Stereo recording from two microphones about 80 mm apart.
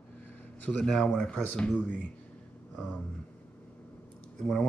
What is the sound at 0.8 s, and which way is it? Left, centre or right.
Speech, centre.